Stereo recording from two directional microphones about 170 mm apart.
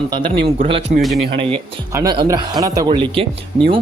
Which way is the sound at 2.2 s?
25° right (ahead or behind).